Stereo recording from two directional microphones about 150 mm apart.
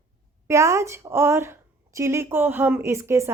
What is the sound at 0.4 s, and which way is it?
Speech, 20° right (ahead or behind).